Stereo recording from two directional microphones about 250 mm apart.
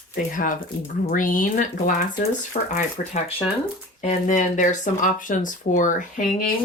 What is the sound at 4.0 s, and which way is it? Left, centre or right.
Speech, left.